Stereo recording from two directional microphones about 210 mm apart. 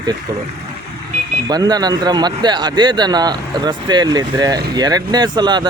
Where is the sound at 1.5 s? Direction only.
20° right (ahead or behind).